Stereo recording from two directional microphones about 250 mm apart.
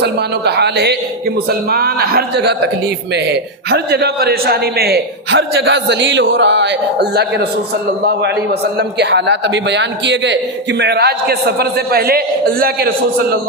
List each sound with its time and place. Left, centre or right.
0.0 s a man's voice: right